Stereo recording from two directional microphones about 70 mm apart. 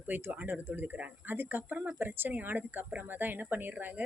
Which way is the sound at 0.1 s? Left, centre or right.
Right.